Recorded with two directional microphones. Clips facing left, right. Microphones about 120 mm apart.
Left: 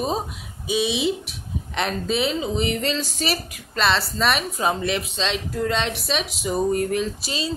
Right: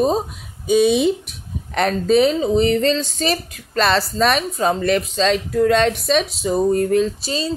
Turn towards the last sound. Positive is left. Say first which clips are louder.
# right 7 dB
turn(degrees=-35)  # may be behind; listen again after turning